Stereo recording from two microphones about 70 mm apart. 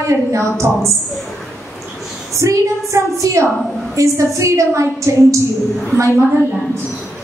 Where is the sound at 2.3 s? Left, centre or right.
Right.